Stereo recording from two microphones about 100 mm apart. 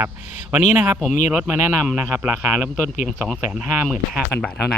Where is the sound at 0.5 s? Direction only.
15° right (ahead or behind).